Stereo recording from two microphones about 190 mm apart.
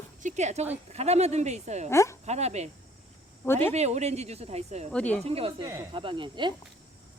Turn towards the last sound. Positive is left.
turn(degrees=-25)  # may be behind; listen again after turning